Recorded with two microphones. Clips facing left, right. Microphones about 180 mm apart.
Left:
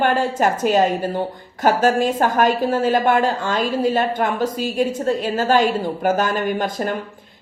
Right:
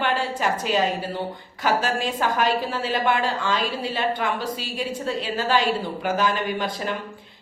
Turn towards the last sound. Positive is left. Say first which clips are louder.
# left 5 dB
turn(degrees=45)  # may be behind; listen again after turning